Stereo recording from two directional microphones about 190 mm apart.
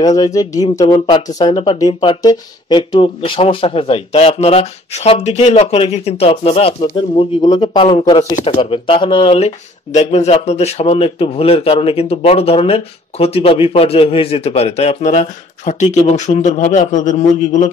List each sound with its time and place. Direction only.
0.0 s a man's voice: 20° left (ahead or behind); by 17.6 s 40° left (ahead or behind)